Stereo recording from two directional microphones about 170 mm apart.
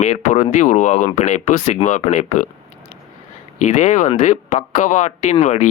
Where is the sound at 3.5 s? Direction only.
45° left (ahead or behind).